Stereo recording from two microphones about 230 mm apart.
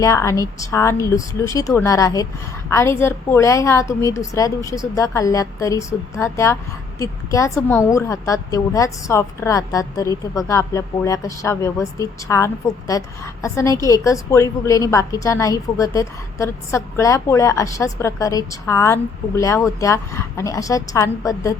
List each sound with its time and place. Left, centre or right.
0.0 s a woman's voice: centre